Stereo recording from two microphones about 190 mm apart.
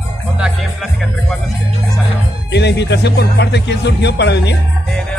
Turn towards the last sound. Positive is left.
turn(degrees=65)  # may be behind; listen again after turning